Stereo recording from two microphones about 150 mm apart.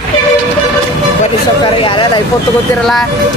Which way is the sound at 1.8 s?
35° left (ahead or behind).